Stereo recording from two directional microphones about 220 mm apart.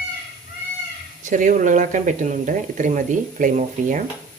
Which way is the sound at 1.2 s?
35° right (ahead or behind).